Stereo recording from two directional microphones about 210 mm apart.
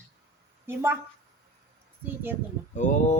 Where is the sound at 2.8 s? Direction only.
35° left (ahead or behind).